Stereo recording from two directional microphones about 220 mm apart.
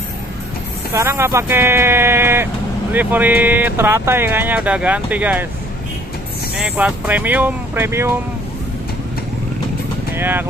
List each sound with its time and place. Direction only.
0.9 s speech: 10° right (ahead or behind)
6.6 s speech: 5° right (ahead or behind)
10.1 s speech: 10° right (ahead or behind)